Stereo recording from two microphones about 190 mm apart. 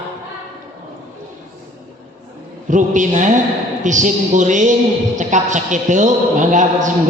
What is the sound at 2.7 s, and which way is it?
Mantra, 40° right (ahead or behind).